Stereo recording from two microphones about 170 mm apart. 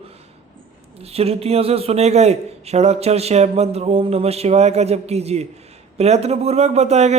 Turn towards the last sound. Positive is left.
turn(degrees=-40)  # may be behind; listen again after turning